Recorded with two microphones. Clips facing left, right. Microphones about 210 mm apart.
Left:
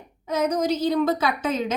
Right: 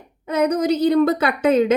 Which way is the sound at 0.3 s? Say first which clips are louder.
Right 4 dB; 60° right (ahead or behind).